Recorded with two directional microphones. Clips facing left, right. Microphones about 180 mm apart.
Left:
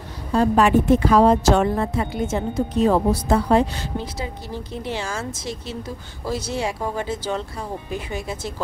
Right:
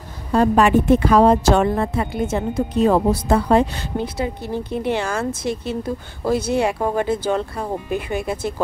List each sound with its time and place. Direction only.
0.3 s a woman's voice: 60° right (ahead or behind)